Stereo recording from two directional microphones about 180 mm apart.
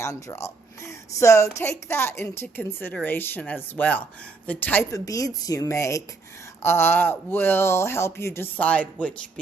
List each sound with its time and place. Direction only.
0.0 s a woman's voice: 15° left (ahead or behind)